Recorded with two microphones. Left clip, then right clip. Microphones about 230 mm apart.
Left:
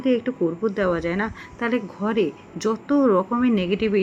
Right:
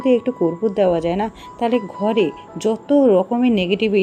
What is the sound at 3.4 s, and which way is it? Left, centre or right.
Speech, centre.